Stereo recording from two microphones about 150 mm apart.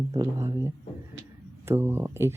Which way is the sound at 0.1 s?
20° right (ahead or behind).